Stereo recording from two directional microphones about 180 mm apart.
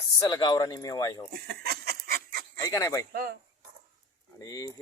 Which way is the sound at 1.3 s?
60° right (ahead or behind).